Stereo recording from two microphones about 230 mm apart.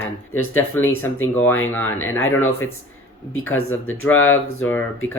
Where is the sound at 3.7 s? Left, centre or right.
Centre.